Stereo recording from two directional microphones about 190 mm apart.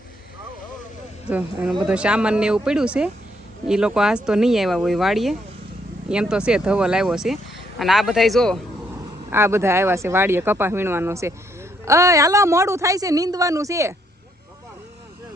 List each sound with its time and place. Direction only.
1.3 s a woman's voice: 10° right (ahead or behind)
9.3 s a woman's voice: 15° right (ahead or behind)